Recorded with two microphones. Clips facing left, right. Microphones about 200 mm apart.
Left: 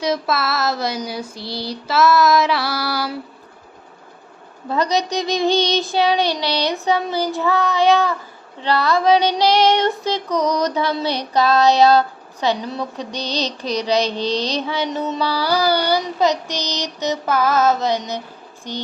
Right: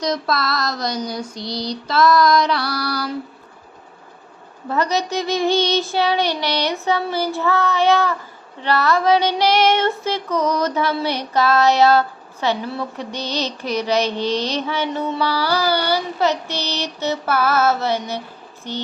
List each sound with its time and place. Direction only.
0.0 s female singing: 5° left (ahead or behind)
4.7 s mantra: 15° left (ahead or behind)